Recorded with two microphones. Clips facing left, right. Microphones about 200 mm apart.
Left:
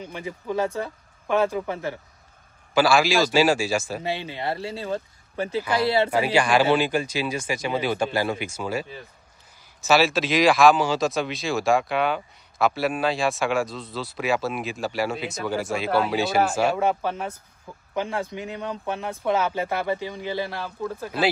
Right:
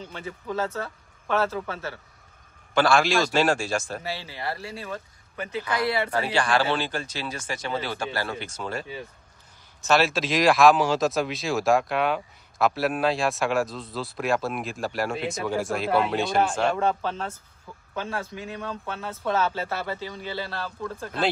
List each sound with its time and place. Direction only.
0.0 s speech: 15° left (ahead or behind)
2.7 s speech: 5° left (ahead or behind)
4.0 s speech: 20° left (ahead or behind)
6.1 s speech: 10° left (ahead or behind)
9.8 s speech: centre (ahead or behind)